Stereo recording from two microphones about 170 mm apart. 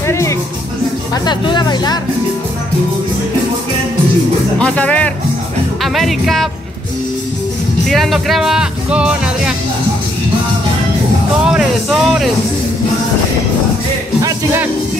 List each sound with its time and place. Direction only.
0.1 s speech: 15° left (ahead or behind)
4.6 s speech: 5° left (ahead or behind)
7.8 s speech: centre (ahead or behind)
11.4 s speech: 5° right (ahead or behind)
14.2 s music: 15° right (ahead or behind)